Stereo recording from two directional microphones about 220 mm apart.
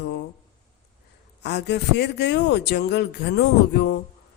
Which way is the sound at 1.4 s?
50° left (ahead or behind).